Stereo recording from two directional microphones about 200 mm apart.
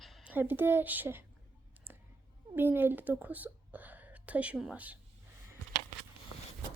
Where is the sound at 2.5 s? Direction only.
10° right (ahead or behind).